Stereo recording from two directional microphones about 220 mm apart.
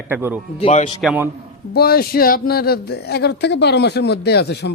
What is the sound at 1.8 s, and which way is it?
Speech, 45° left (ahead or behind).